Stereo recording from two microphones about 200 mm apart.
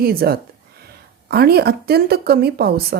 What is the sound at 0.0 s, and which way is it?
Speech, 50° right (ahead or behind).